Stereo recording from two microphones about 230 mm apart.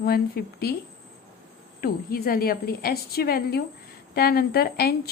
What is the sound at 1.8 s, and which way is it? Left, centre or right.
Speech, left.